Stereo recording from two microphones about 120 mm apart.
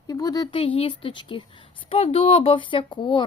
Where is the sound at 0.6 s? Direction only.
50° left (ahead or behind).